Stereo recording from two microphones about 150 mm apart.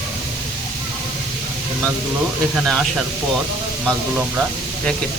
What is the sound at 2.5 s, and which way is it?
Speech, centre (ahead or behind).